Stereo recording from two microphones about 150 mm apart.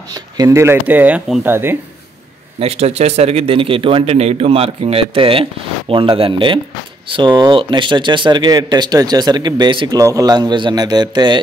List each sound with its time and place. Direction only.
0.1 s speech: 25° right (ahead or behind)
2.6 s a man's voice: 40° right (ahead or behind)